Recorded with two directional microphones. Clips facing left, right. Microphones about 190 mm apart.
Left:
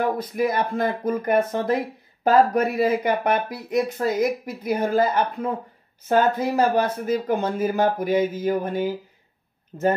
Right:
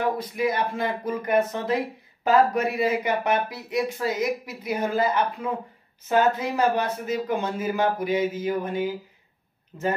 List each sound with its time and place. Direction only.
0.3 s speech: 45° left (ahead or behind)